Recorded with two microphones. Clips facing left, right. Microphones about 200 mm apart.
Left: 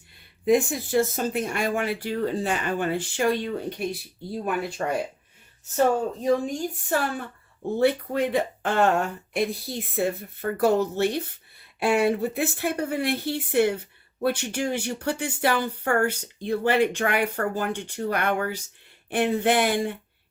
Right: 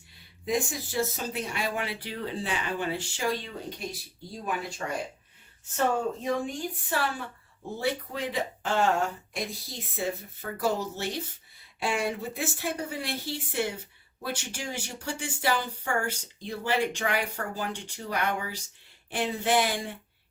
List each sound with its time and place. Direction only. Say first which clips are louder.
0.4 s speech: left 8 dB; 55° left (ahead or behind)
6.2 s speech: left 6 dB; 40° left (ahead or behind); by 20.0 s 60° left (ahead or behind)